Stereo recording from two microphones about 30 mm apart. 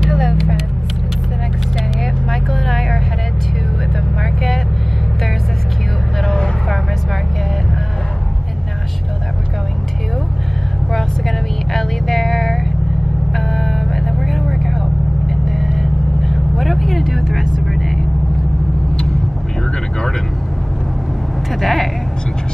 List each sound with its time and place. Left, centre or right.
0.0 s vehicle: centre
2.3 s vehicle: centre
3.9 s vehicle: centre
6.2 s vehicle: left
10.9 s vehicle: centre
21.5 s a sound: centre